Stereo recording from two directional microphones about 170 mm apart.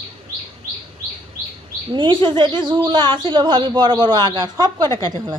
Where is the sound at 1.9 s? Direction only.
30° right (ahead or behind).